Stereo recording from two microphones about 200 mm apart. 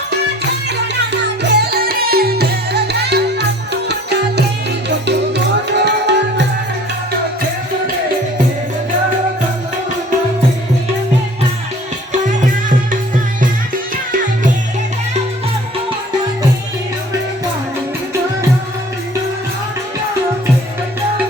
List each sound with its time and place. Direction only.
1.1 s music: 55° right (ahead or behind)
12.3 s music: 40° right (ahead or behind)